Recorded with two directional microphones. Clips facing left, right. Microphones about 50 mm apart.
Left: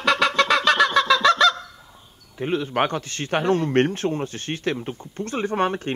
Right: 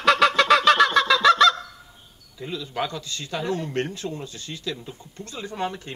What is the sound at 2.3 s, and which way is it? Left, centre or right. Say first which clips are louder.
A man's voice: left 8 dB; left.